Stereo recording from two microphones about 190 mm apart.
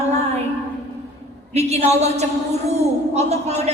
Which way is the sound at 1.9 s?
35° right (ahead or behind).